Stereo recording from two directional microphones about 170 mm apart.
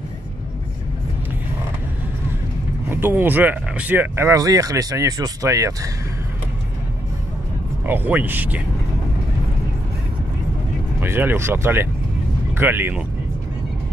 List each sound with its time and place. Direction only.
2.9 s speech: 10° right (ahead or behind)
7.8 s speech: 10° right (ahead or behind)
11.0 s speech: 10° right (ahead or behind)